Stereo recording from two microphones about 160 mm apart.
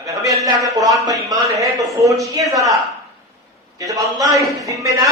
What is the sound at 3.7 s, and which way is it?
A man's voice, 20° right (ahead or behind).